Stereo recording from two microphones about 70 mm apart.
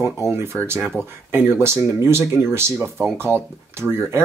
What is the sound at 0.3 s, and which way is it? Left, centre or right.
Speech, right.